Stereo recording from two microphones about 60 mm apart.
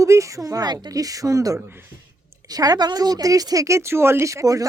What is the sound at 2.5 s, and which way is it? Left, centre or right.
Speech, right.